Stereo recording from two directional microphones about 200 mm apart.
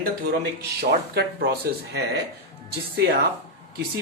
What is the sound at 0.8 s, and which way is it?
Speech, 55° right (ahead or behind).